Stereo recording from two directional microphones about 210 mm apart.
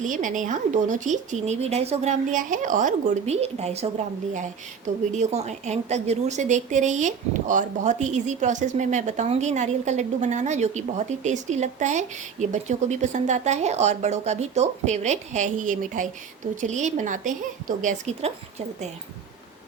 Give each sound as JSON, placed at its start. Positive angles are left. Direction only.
{"t": 0.0, "sound": "a woman's voice", "side_deg": -35}